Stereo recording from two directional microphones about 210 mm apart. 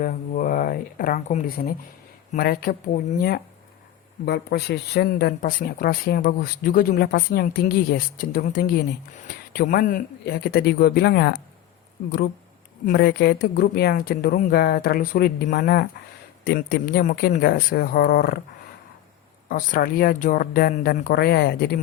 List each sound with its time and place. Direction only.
0.0 s speech: 40° left (ahead or behind)
12.8 s speech: 45° left (ahead or behind)
19.5 s speech: 40° left (ahead or behind)